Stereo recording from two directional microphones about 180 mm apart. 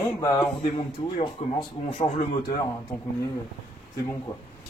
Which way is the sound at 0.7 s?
30° left (ahead or behind).